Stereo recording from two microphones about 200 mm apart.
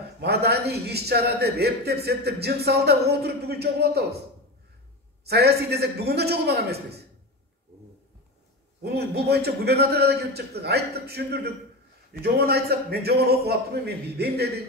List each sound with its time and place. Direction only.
0.2 s a man's voice: 55° right (ahead or behind)
5.2 s a man's voice: 55° right (ahead or behind)
8.8 s a man's voice: 55° right (ahead or behind)